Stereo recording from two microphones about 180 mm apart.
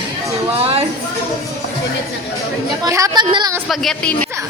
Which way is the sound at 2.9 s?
20° right (ahead or behind).